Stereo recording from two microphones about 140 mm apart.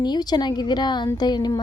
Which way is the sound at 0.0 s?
30° left (ahead or behind).